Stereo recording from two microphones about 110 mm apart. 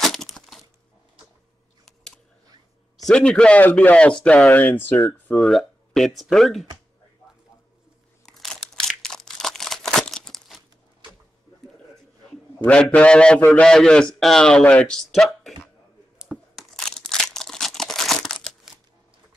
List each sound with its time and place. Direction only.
0.0 s a sound: centre (ahead or behind)
3.1 s speech: 10° left (ahead or behind)
5.4 s speech: centre (ahead or behind)
8.3 s crumpling: 5° left (ahead or behind)
12.6 s speech: 10° left (ahead or behind)
16.2 s a sound: 5° right (ahead or behind)
16.7 s crumpling: 5° left (ahead or behind)